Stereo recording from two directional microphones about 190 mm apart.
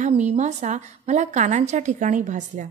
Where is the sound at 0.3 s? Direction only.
40° right (ahead or behind).